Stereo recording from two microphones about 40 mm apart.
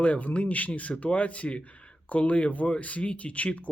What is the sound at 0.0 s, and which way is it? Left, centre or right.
Speech, left.